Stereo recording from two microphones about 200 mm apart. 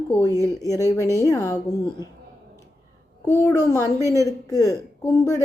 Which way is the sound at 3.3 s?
15° left (ahead or behind).